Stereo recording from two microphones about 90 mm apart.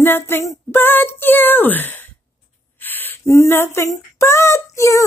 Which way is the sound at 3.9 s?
30° left (ahead or behind).